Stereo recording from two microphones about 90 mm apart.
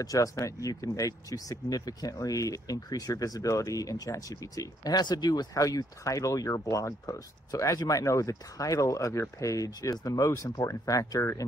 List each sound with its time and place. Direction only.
0.0 s speech: 40° left (ahead or behind)